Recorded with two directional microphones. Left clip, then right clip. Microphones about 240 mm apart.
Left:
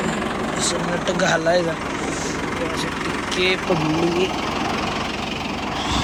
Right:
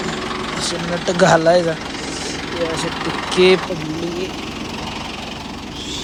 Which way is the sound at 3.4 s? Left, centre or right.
Right.